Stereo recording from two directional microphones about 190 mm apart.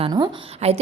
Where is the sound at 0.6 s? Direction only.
35° right (ahead or behind).